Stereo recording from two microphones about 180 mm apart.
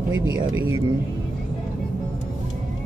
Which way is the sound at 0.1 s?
90° right.